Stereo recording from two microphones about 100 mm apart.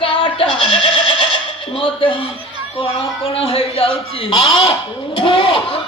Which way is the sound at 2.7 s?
70° left (ahead or behind).